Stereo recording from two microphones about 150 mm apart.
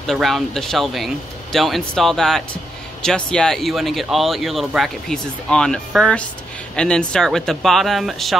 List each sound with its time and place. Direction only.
0.0 s speech: centre (ahead or behind)